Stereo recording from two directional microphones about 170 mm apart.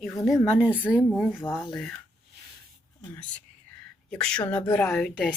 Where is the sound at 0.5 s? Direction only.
5° right (ahead or behind).